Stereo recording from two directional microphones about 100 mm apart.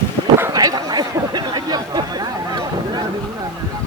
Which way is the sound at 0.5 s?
40° right (ahead or behind).